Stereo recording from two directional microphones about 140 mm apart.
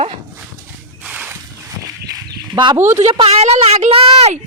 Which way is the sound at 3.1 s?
45° right (ahead or behind).